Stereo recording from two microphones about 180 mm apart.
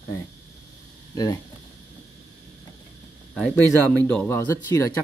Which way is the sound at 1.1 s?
20° left (ahead or behind).